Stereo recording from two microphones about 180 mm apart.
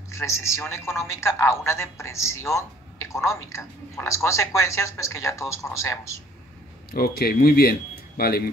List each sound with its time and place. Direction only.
0.1 s a man's voice: 15° left (ahead or behind)
6.9 s speech: 55° left (ahead or behind)